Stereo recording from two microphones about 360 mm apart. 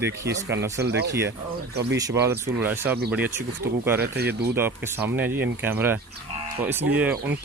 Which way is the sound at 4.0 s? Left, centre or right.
Right.